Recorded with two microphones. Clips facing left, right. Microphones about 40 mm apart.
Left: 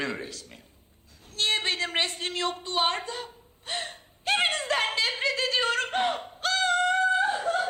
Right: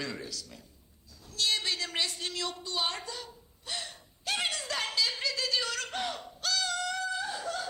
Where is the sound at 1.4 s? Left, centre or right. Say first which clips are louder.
Left 4 dB; left.